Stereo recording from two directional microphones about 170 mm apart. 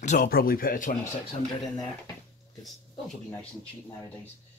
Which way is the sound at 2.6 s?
Centre (ahead or behind).